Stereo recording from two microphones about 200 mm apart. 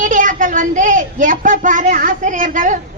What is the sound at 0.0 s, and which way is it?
A woman's voice, 40° right (ahead or behind).